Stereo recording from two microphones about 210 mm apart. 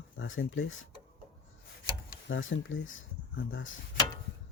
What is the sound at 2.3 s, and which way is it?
Speech, 65° left (ahead or behind).